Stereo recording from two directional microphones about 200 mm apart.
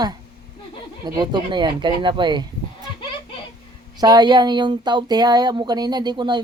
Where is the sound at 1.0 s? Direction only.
20° right (ahead or behind).